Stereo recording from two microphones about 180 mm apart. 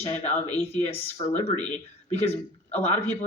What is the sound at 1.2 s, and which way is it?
A man's voice, 30° left (ahead or behind).